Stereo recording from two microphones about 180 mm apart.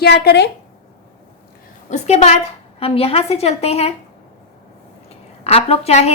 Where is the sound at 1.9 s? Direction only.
40° left (ahead or behind).